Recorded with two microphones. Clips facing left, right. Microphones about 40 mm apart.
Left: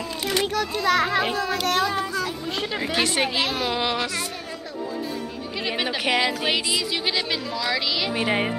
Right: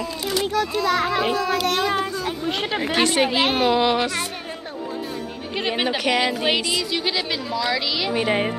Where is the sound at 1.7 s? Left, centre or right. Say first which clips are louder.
Right 1 dB; right.